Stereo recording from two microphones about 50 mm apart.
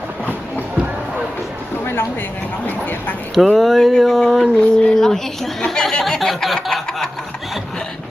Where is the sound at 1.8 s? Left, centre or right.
Left.